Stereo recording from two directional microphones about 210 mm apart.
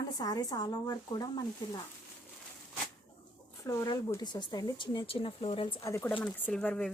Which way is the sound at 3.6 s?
15° left (ahead or behind).